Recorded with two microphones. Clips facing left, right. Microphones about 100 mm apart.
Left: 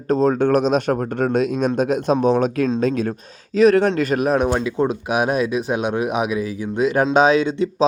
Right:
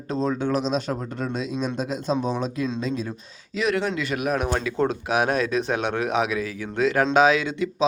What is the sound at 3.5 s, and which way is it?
Speech, 40° left (ahead or behind).